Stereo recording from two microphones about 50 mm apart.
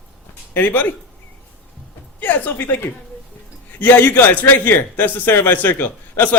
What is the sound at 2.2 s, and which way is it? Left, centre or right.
Speech, left.